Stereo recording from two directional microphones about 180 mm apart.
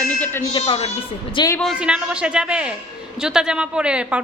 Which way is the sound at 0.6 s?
35° left (ahead or behind).